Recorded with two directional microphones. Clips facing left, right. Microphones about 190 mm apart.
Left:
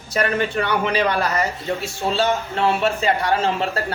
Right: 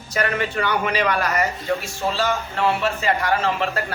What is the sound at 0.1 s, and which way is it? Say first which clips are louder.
Speech: left 2 dB; 30° left (ahead or behind).